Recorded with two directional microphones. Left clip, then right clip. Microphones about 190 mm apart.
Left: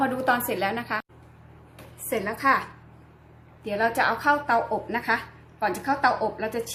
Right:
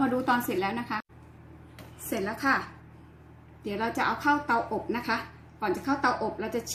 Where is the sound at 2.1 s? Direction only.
45° left (ahead or behind).